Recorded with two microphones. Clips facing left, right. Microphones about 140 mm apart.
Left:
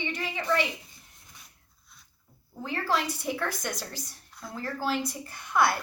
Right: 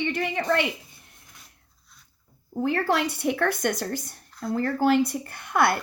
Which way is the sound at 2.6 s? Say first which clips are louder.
Right 5 dB; 60° right (ahead or behind).